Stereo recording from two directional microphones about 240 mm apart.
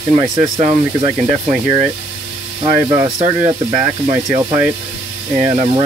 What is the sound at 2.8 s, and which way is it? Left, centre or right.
Speech, centre.